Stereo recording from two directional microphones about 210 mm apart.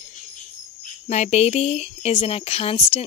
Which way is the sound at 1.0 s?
35° left (ahead or behind).